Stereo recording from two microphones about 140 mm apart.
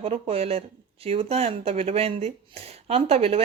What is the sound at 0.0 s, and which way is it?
Speech, 45° right (ahead or behind).